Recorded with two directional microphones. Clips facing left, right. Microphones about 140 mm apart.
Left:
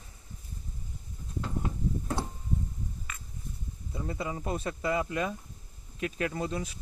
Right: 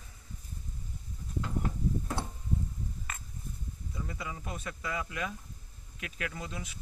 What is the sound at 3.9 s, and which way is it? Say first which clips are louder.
Speech: left 6 dB; 30° left (ahead or behind).